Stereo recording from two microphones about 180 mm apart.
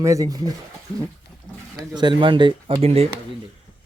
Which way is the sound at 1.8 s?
25° right (ahead or behind).